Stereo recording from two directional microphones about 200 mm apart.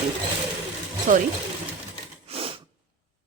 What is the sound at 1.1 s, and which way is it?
Speech, 40° right (ahead or behind).